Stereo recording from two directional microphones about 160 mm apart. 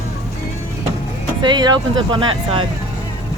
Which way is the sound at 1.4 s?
25° right (ahead or behind).